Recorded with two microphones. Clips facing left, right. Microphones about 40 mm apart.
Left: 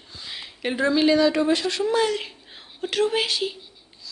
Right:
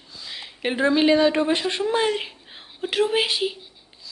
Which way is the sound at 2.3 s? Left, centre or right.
Centre.